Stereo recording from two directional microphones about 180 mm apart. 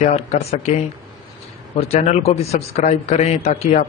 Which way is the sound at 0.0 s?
40° left (ahead or behind).